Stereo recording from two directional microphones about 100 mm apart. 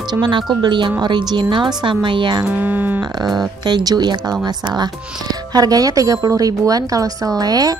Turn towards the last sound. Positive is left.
turn(degrees=-40)  # may be behind; listen again after turning